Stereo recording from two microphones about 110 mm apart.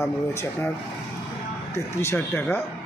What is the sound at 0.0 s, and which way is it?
Speech, 25° left (ahead or behind).